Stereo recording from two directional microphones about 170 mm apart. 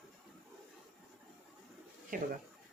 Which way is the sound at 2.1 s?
55° right (ahead or behind).